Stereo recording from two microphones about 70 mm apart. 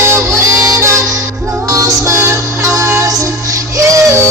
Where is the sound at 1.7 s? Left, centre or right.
Right.